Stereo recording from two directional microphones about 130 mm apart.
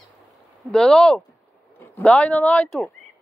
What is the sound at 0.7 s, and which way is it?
Speech, 5° left (ahead or behind).